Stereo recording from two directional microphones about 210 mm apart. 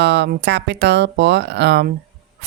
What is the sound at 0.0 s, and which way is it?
Speech, 55° right (ahead or behind).